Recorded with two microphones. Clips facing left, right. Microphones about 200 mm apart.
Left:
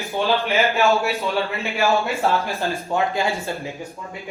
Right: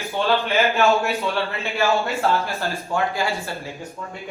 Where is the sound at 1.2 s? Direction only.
15° left (ahead or behind).